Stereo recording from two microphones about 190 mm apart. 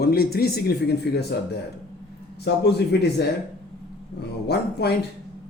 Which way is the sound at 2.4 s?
60° left (ahead or behind).